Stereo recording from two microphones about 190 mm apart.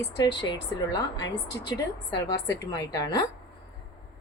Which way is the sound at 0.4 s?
20° left (ahead or behind).